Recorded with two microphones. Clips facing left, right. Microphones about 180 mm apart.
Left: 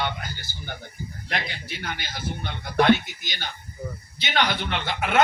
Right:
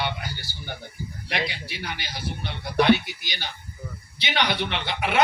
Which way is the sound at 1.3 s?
50° left (ahead or behind).